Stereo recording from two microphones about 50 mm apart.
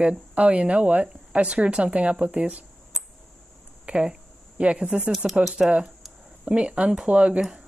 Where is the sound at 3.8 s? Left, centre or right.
Right.